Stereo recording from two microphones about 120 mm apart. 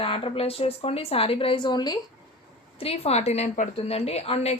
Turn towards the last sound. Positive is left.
turn(degrees=60)  # may be behind; listen again after turning